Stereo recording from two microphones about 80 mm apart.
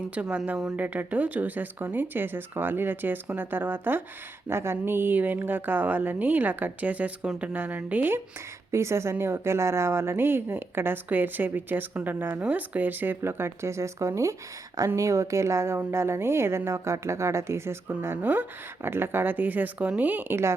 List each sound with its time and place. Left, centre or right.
0.1 s a woman's voice: centre
8.7 s a woman's voice: right